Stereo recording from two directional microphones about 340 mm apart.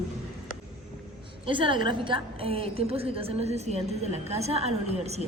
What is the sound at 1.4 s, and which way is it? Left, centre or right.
A woman's voice, centre.